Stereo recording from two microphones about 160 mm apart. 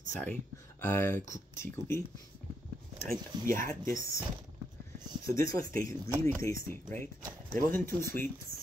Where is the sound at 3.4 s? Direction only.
15° left (ahead or behind).